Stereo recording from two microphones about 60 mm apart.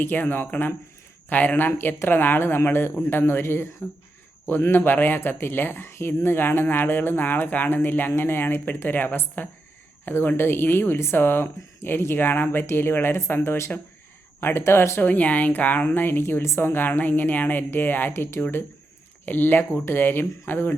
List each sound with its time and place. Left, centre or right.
0.0 s speech: left
15.0 s speech: left